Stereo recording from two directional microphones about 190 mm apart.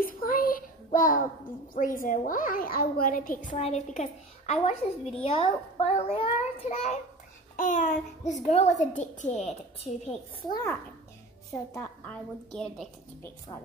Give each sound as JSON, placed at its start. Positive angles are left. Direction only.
{"t": 0.0, "sound": "a sound", "side_deg": 45}
{"t": 1.7, "sound": "a woman's voice", "side_deg": 45}
{"t": 10.5, "sound": "a woman's voice", "side_deg": 15}
{"t": 12.5, "sound": "a woman's voice", "side_deg": 5}